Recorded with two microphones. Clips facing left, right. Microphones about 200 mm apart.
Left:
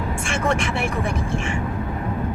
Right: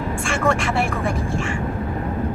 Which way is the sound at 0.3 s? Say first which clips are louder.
Right 2 dB; 20° left (ahead or behind).